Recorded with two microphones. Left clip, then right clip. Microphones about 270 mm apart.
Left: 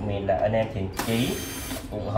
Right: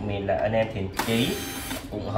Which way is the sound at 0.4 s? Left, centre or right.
Centre.